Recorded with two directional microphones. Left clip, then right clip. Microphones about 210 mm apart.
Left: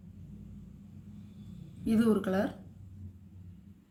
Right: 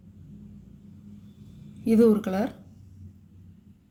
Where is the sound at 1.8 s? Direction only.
35° right (ahead or behind).